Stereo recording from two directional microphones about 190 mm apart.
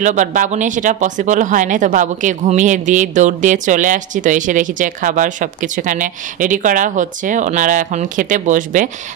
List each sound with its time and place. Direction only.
0.0 s speech: 40° right (ahead or behind)